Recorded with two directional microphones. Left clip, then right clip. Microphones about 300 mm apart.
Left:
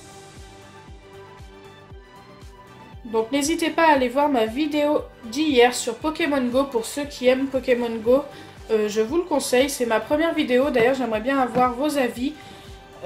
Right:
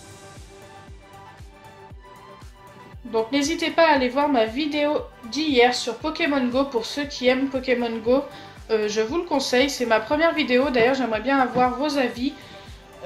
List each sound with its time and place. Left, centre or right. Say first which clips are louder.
3.3 s speech: left 1 dB; centre